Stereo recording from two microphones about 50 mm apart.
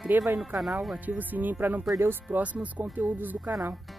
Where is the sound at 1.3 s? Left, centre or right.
Right.